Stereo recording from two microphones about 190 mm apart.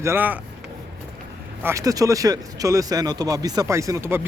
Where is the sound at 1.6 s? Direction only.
15° right (ahead or behind).